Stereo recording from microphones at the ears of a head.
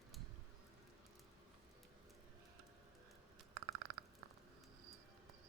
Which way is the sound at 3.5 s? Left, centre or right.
Right.